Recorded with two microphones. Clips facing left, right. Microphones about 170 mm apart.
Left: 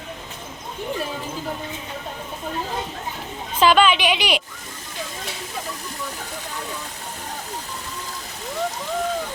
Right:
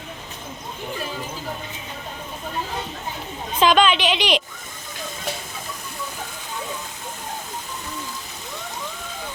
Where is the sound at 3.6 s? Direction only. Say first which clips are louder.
Left 1 dB; 5° left (ahead or behind).